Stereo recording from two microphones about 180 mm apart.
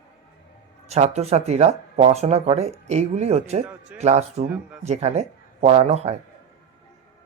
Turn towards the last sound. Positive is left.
turn(degrees=-35)  # may be behind; listen again after turning